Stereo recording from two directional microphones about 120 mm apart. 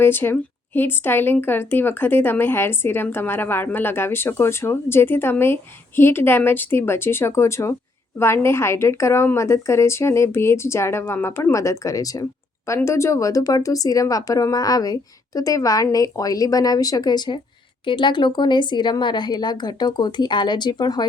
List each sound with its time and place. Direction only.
0.0 s a woman's voice: 20° left (ahead or behind); by 21.1 s 35° left (ahead or behind)